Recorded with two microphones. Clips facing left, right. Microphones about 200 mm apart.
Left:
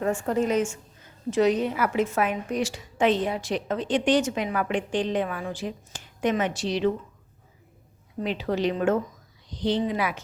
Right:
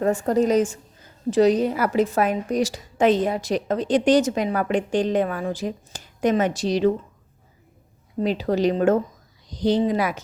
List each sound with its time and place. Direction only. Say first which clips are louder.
0.0 s a woman's voice: right 5 dB; 40° right (ahead or behind)
8.2 s a woman's voice: right 5 dB; 40° right (ahead or behind)